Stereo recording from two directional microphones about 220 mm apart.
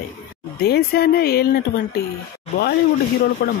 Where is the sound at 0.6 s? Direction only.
45° left (ahead or behind).